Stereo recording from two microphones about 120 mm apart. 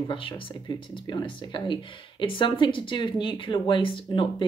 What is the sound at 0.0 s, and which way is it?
Speech, 45° left (ahead or behind).